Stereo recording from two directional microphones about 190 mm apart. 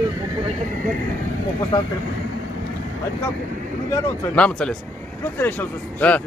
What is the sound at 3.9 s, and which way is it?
Speech, 5° left (ahead or behind).